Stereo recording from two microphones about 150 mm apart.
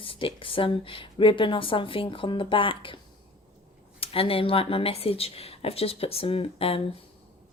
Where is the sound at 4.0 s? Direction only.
40° left (ahead or behind).